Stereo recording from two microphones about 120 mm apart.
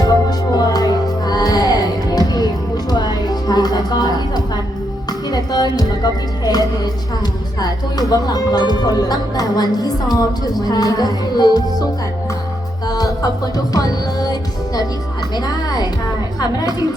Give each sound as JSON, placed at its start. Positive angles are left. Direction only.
{"t": 0.0, "sound": "music", "side_deg": 30}
{"t": 7.6, "sound": "speech", "side_deg": 30}
{"t": 12.9, "sound": "music", "side_deg": 30}
{"t": 15.4, "sound": "speech", "side_deg": 35}